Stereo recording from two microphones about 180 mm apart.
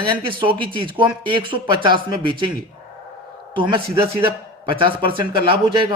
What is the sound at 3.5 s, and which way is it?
Speech, 25° right (ahead or behind).